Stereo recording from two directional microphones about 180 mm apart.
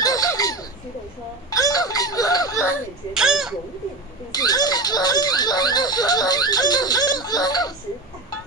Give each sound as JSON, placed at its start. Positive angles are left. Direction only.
{"t": 0.0, "sound": "a sound", "side_deg": 20}
{"t": 3.2, "sound": "speech", "side_deg": -5}
{"t": 4.3, "sound": "speech", "side_deg": 20}